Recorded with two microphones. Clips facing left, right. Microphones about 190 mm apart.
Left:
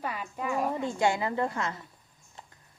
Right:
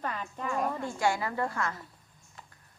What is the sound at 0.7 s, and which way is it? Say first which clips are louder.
A woman's voice: left 2 dB; 20° left (ahead or behind).